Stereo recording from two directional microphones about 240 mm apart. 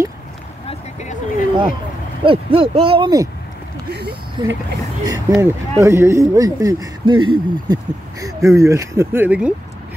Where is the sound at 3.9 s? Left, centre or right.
Right.